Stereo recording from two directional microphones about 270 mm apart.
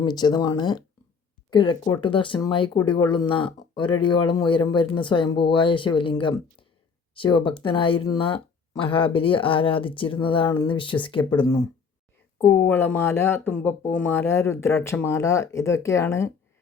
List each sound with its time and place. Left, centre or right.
0.0 s speech: centre